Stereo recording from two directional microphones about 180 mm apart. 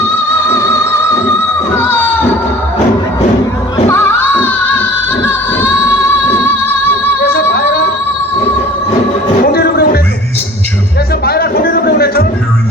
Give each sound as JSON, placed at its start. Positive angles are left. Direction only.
{"t": 0.4, "sound": "music", "side_deg": 15}
{"t": 1.8, "sound": "a sound", "side_deg": 10}
{"t": 3.8, "sound": "music", "side_deg": 10}
{"t": 7.3, "sound": "music", "side_deg": 60}
{"t": 9.4, "sound": "music", "side_deg": 60}
{"t": 11.3, "sound": "a sound", "side_deg": 60}